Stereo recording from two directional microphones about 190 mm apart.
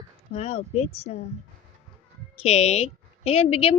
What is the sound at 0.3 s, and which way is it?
Speech, 35° left (ahead or behind).